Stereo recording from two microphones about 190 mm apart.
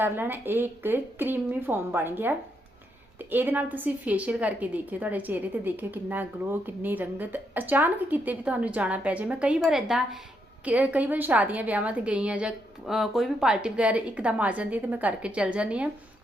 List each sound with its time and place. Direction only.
0.0 s a woman's voice: 10° right (ahead or behind)